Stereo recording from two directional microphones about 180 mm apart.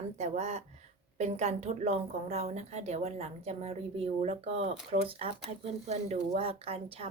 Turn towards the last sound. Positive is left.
turn(degrees=-30)  # may be behind; listen again after turning